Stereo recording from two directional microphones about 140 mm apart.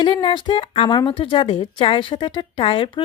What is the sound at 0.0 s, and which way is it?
A woman's voice, 35° left (ahead or behind).